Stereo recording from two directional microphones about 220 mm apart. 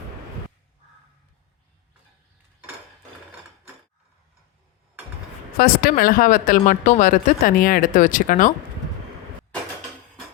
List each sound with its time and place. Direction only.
5.5 s speech: 40° left (ahead or behind)